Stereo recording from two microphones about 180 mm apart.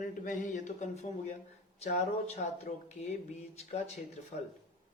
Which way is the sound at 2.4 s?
45° left (ahead or behind).